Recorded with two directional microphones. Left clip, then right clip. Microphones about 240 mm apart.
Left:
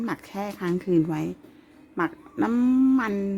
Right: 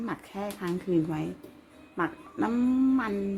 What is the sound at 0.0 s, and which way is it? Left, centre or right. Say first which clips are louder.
Speech: left 4 dB; left.